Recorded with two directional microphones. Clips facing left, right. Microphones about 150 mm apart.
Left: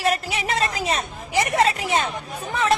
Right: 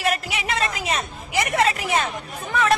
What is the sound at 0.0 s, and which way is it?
A woman's voice, 35° left (ahead or behind).